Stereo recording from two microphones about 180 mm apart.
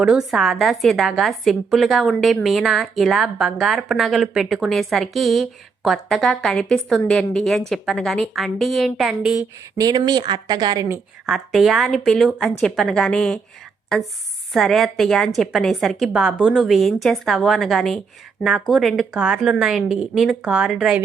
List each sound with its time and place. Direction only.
0.0 s a woman's voice: 5° right (ahead or behind)
9.7 s speech: 20° right (ahead or behind)
11.3 s a woman's voice: centre (ahead or behind)
14.5 s a woman's voice: centre (ahead or behind)